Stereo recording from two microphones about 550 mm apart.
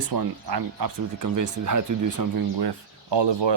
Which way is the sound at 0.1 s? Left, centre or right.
Right.